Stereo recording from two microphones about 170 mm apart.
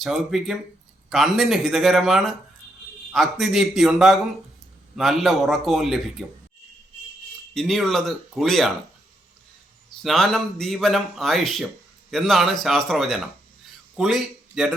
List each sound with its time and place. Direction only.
0.0 s a man's voice: centre (ahead or behind)
7.5 s a man's voice: centre (ahead or behind)
10.0 s a man's voice: centre (ahead or behind)